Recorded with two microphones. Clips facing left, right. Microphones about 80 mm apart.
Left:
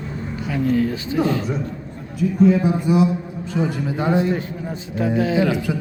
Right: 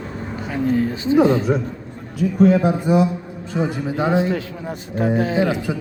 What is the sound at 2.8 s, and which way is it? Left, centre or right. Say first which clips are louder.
Speech: right 1 dB; right.